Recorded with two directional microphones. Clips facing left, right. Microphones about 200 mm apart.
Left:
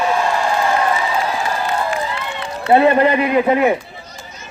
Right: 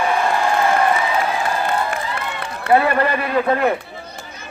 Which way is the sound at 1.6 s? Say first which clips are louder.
Left 1 dB; 55° right (ahead or behind).